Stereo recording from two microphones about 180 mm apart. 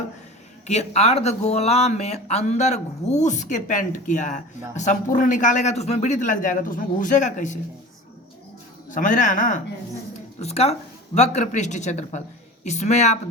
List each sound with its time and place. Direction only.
0.7 s speech: 35° left (ahead or behind)
8.9 s speech: 45° left (ahead or behind)